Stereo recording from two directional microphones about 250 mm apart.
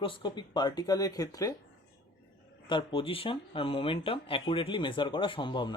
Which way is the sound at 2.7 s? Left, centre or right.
Centre.